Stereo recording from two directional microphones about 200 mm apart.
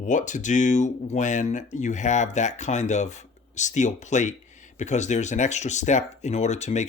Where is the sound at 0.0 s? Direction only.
40° left (ahead or behind).